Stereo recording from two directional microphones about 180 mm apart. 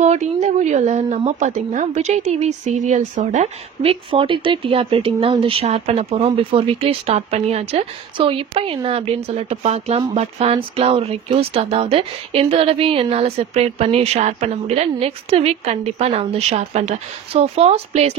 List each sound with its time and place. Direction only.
0.0 s a woman's voice: 40° right (ahead or behind)